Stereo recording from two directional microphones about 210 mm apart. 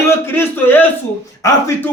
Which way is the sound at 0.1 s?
10° left (ahead or behind).